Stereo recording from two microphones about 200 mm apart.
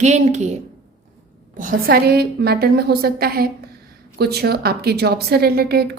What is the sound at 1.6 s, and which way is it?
A woman's voice, 45° right (ahead or behind).